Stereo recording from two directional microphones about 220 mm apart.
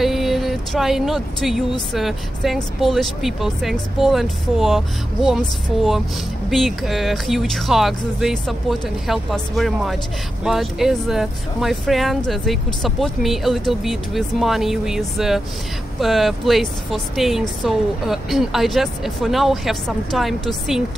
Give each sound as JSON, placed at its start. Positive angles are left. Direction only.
{"t": 0.0, "sound": "speech", "side_deg": 0}